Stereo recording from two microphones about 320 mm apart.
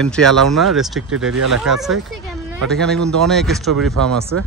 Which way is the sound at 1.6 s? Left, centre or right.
Centre.